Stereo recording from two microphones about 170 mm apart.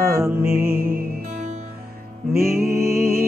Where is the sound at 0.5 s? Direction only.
65° right (ahead or behind).